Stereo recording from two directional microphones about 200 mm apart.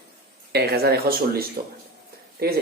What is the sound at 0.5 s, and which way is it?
Speech, 50° right (ahead or behind).